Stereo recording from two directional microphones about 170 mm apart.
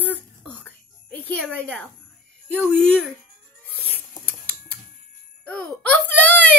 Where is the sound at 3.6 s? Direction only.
5° left (ahead or behind).